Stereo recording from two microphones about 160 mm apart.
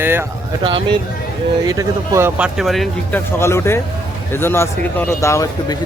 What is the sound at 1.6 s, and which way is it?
Speech, 20° right (ahead or behind).